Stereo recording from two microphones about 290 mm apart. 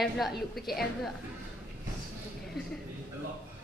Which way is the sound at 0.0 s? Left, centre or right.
Centre.